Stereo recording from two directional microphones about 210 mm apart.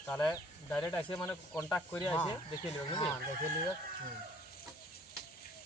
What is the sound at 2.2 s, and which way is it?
Speech, 20° left (ahead or behind).